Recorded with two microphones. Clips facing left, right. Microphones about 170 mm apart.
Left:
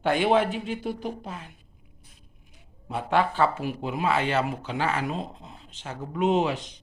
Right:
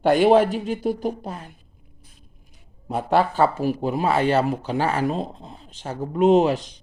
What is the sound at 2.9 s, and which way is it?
Speech, 40° right (ahead or behind).